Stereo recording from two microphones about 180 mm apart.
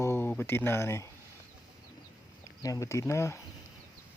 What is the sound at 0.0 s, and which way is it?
Speech, 10° left (ahead or behind).